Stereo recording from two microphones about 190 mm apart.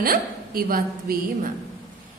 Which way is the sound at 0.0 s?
50° right (ahead or behind).